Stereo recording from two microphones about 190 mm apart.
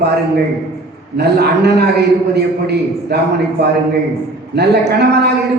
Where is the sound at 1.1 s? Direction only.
60° right (ahead or behind).